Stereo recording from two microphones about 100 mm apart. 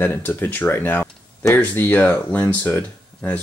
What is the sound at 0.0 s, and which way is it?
Speech, 20° left (ahead or behind).